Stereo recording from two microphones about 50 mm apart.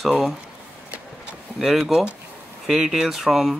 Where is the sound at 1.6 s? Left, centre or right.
Centre.